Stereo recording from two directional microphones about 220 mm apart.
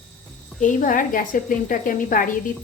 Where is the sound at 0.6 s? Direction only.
35° left (ahead or behind).